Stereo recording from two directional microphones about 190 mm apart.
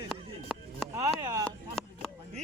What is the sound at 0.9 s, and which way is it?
Speech, 20° right (ahead or behind).